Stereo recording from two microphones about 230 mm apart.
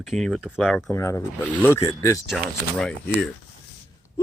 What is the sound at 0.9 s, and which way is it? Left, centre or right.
Speech, centre.